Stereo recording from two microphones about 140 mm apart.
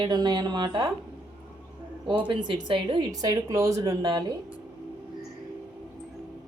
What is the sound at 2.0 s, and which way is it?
Speech, 35° right (ahead or behind).